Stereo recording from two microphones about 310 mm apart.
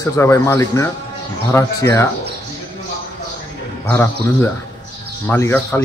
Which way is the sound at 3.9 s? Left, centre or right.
Centre.